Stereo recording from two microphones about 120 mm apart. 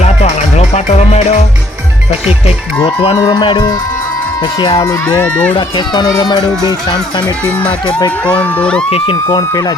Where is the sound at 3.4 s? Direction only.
40° left (ahead or behind).